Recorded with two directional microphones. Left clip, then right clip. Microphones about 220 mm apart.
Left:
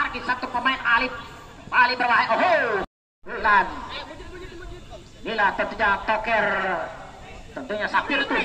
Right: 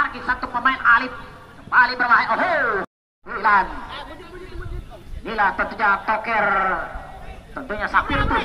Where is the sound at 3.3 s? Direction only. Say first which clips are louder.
Right 2 dB; 15° right (ahead or behind).